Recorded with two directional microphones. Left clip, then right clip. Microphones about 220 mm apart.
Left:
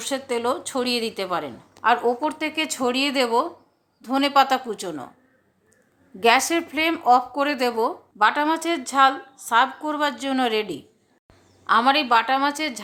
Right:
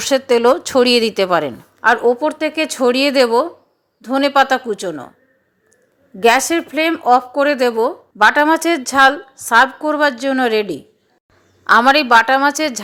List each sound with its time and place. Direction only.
0.0 s speech: 30° right (ahead or behind)
6.1 s speech: 20° right (ahead or behind)